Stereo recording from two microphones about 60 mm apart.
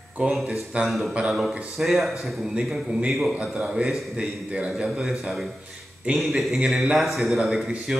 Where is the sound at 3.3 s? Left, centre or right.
Centre.